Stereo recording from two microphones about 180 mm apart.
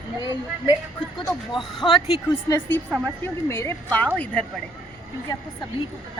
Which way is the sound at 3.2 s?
15° left (ahead or behind).